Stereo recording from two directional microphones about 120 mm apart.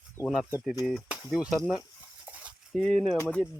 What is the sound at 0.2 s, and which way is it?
Speech, 25° left (ahead or behind).